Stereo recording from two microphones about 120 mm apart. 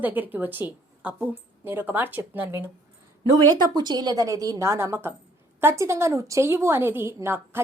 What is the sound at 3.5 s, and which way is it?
A woman's voice, 35° right (ahead or behind).